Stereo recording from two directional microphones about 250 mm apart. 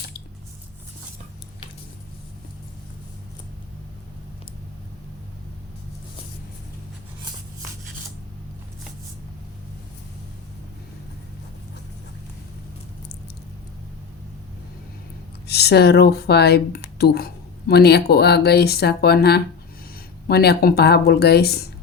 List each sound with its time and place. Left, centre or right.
15.4 s speech: left